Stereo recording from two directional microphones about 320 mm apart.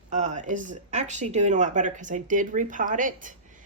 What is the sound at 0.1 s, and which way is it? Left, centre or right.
Speech, right.